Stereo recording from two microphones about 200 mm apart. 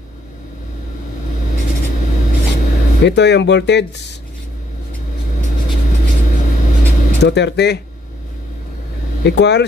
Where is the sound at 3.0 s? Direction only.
60° left (ahead or behind).